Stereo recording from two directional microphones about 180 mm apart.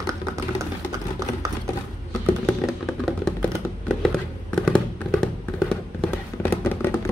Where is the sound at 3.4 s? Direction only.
5° left (ahead or behind).